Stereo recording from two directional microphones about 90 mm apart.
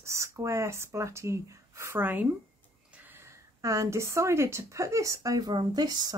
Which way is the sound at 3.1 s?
30° right (ahead or behind).